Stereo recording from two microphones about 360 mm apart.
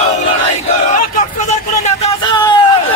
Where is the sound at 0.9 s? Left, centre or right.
Left.